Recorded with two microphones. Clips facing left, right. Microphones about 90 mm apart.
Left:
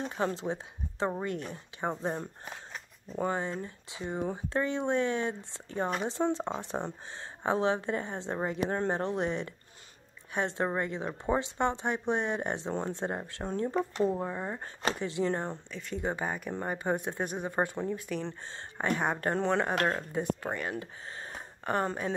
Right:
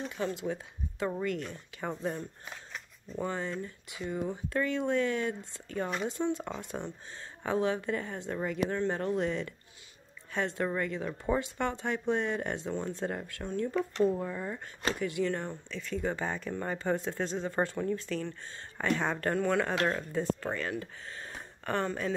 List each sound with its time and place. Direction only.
0.1 s speech: 35° left (ahead or behind)
3.3 s speech: 25° left (ahead or behind)
15.7 s speech: 20° left (ahead or behind)
20.8 s a sound: 20° left (ahead or behind)